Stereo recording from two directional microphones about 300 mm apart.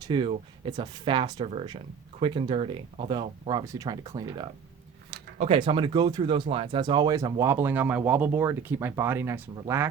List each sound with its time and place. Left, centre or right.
0.0 s speech: centre